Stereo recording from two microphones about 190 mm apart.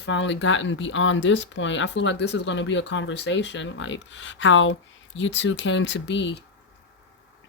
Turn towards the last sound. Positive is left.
turn(degrees=70)  # may be behind; listen again after turning